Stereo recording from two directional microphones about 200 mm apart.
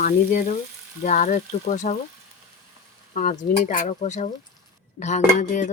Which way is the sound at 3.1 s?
40° left (ahead or behind).